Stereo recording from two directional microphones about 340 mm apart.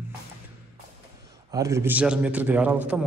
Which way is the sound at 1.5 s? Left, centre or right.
Centre.